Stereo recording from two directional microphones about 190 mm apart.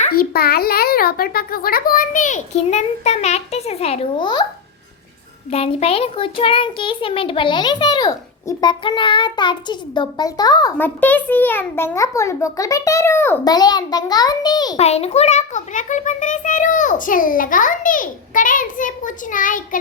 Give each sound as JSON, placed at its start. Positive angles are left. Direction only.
{"t": 0.1, "sound": "a child's voice", "side_deg": 55}
{"t": 5.5, "sound": "a child's voice", "side_deg": 30}
{"t": 14.8, "sound": "a child's voice", "side_deg": 35}